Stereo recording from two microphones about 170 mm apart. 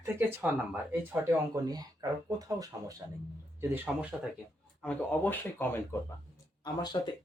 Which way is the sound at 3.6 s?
10° right (ahead or behind).